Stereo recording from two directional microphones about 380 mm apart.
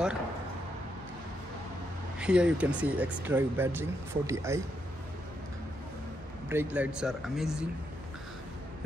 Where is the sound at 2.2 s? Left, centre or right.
Centre.